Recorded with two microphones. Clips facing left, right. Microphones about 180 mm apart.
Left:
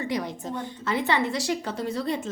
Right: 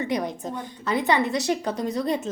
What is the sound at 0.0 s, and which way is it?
A woman's voice, 20° right (ahead or behind).